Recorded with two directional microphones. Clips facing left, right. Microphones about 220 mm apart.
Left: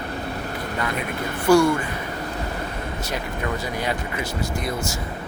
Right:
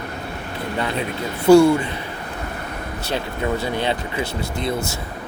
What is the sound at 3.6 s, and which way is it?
Speech, 25° right (ahead or behind).